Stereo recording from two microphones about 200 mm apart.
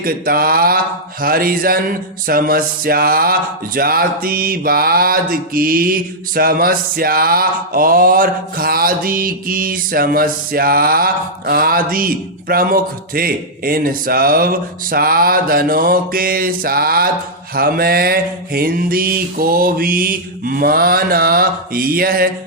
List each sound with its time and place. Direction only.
0.0 s mantra: 45° right (ahead or behind)